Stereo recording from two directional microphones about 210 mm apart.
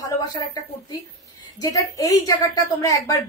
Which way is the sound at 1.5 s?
15° left (ahead or behind).